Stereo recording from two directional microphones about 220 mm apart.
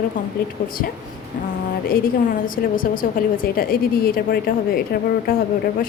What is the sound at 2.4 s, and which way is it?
A woman's voice, 40° left (ahead or behind).